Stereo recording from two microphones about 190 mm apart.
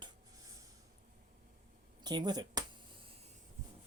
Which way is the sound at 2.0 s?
20° right (ahead or behind).